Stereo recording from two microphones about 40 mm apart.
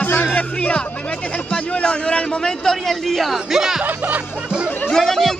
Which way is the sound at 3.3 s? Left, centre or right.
Centre.